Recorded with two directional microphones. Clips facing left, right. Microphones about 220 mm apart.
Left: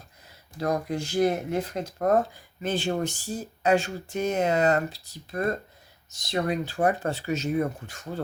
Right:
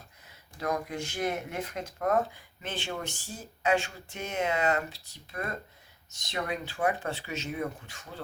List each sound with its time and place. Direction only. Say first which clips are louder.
0.6 s speech: left 5 dB; 35° left (ahead or behind)